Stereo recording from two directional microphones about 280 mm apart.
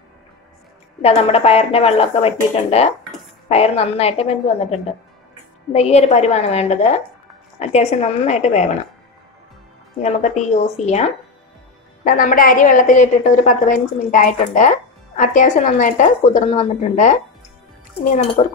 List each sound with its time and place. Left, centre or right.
1.0 s a woman's voice: left
10.0 s a woman's voice: left
18.4 s a woman's voice: left